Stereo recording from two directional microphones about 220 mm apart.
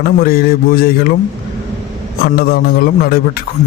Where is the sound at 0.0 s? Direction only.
45° left (ahead or behind).